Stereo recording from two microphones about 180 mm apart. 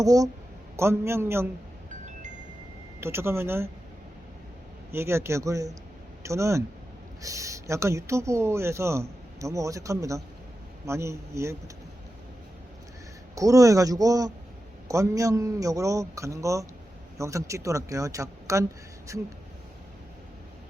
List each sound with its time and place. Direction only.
0.0 s speech: 20° right (ahead or behind)
3.0 s speech: 15° right (ahead or behind)
4.9 s speech: 15° right (ahead or behind)
13.3 s speech: 20° right (ahead or behind)